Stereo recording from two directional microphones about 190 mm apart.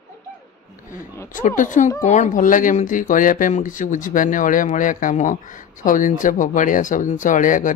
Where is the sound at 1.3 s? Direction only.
45° left (ahead or behind).